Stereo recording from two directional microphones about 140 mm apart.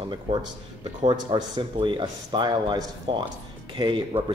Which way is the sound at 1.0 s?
35° right (ahead or behind).